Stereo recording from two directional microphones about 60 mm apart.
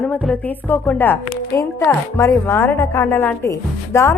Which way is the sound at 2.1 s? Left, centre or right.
Left.